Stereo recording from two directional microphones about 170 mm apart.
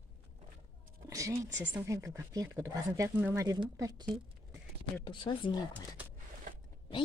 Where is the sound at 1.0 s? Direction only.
20° right (ahead or behind).